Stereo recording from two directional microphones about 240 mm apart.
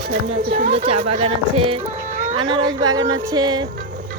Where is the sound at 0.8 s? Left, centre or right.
Right.